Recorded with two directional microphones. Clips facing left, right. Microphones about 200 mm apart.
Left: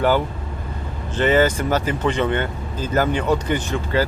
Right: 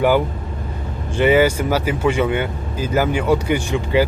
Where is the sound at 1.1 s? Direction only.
10° right (ahead or behind).